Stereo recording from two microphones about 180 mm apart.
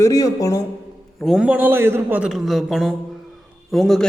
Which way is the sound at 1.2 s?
Centre (ahead or behind).